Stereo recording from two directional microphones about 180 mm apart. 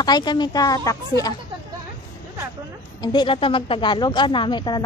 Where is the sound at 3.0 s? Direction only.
25° left (ahead or behind).